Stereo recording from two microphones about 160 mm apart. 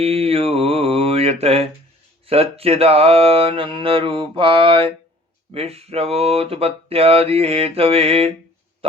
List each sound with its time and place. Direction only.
0.0 s mantra: 40° right (ahead or behind)